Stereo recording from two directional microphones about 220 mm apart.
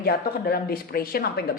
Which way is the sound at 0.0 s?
45° left (ahead or behind).